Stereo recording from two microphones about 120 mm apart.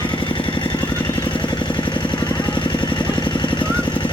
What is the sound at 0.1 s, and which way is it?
Vehicle, 45° left (ahead or behind).